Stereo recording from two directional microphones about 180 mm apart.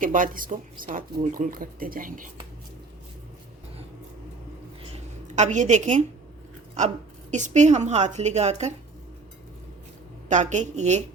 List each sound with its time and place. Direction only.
0.0 s speech: 50° right (ahead or behind)
5.3 s a woman's voice: 40° right (ahead or behind)
10.2 s a woman's voice: 40° right (ahead or behind)